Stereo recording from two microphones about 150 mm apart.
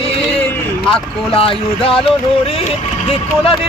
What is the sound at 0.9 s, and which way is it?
Speech, 35° left (ahead or behind).